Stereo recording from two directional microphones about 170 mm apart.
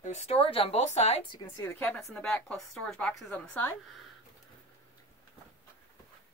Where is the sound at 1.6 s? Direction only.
10° left (ahead or behind).